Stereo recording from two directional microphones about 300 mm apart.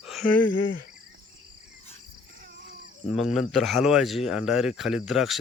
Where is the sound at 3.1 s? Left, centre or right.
Centre.